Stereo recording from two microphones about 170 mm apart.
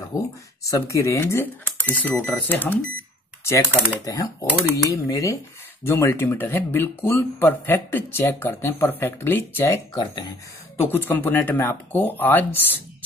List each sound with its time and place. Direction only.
0.1 s speech: 20° left (ahead or behind)
9.9 s speech: 25° left (ahead or behind)
10.8 s speech: 15° left (ahead or behind)